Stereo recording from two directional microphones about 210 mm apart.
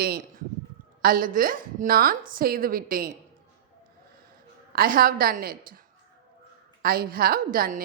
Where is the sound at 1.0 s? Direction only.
40° right (ahead or behind).